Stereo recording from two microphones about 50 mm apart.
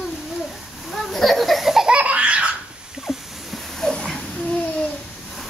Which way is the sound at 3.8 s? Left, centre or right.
Centre.